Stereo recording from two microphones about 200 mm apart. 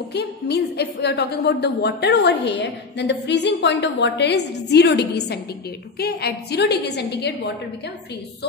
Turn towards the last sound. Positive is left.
turn(degrees=55)  # may be behind; listen again after turning